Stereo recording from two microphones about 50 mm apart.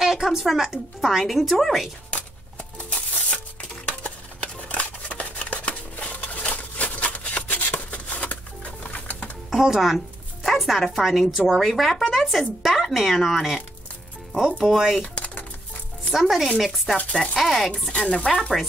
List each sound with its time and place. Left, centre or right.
0.0 s speech: centre
2.0 s a sound: left
9.5 s speech: centre
14.6 s speech: centre
15.0 s typewriter: left
16.1 s speech: centre
17.1 s speech: centre
17.4 s speech: centre
17.9 s speech: centre